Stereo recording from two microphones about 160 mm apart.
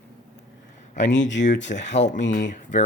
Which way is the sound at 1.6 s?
90° left.